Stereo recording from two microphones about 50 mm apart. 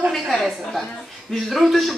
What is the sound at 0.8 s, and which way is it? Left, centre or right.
A woman's voice, centre.